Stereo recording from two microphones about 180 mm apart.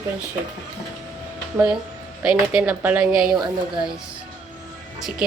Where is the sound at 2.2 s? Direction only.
5° right (ahead or behind).